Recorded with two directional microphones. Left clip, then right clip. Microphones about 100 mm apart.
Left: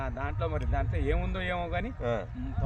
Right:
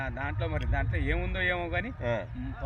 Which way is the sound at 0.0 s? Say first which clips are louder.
Even; 45° left (ahead or behind).